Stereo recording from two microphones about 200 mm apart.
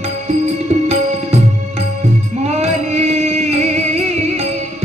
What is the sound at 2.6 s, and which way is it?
Music, 35° right (ahead or behind).